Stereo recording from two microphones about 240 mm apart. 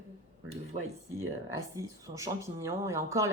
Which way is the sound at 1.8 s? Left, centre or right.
Centre.